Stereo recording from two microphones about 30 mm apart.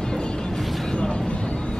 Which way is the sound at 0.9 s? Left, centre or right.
Left.